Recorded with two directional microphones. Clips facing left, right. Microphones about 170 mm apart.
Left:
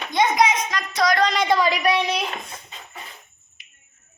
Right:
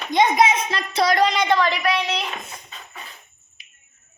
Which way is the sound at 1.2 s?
Centre (ahead or behind).